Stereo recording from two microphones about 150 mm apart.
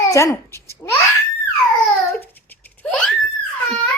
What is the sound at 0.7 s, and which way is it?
Babbling, 15° left (ahead or behind).